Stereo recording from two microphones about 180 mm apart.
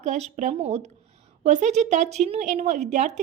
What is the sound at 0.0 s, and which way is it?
A woman's voice, 40° right (ahead or behind).